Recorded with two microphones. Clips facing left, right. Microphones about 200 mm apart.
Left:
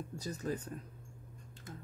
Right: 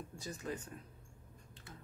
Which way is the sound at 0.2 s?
40° left (ahead or behind).